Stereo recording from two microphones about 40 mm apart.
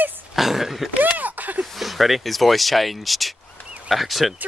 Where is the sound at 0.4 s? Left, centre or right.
Centre.